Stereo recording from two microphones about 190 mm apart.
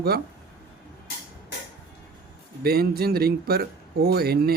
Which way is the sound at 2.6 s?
55° right (ahead or behind).